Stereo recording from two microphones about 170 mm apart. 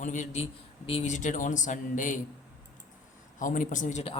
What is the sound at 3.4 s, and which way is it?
Speech, 50° left (ahead or behind).